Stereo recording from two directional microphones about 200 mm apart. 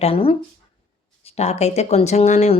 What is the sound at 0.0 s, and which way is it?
Speech, 30° left (ahead or behind).